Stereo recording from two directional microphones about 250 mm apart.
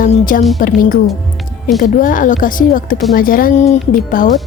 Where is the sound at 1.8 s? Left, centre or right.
Left.